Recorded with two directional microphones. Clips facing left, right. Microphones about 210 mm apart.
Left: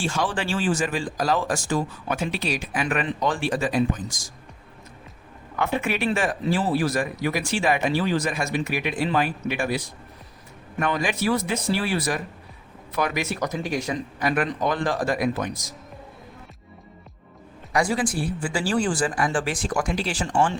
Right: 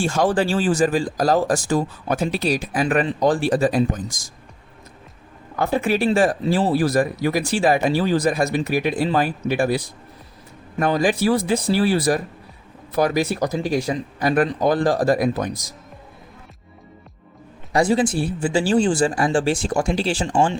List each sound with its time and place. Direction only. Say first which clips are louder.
0.0 s speech: right 7 dB; 45° right (ahead or behind)
5.5 s speech: right 5 dB; 35° right (ahead or behind)
17.7 s speech: right 5 dB; 25° right (ahead or behind)